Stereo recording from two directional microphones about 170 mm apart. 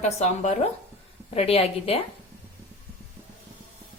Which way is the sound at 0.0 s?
40° left (ahead or behind).